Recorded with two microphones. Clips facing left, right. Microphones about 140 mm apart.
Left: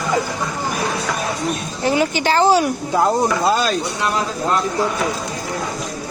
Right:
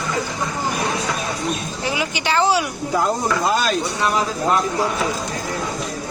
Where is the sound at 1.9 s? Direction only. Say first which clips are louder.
Left 6 dB; 45° left (ahead or behind).